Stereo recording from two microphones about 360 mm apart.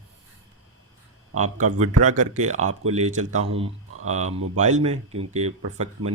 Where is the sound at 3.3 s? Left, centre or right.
Right.